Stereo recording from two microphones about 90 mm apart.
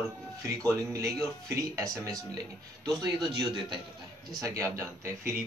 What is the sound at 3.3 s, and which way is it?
Speech, 60° right (ahead or behind).